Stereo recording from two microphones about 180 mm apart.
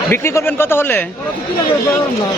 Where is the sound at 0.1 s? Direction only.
15° left (ahead or behind).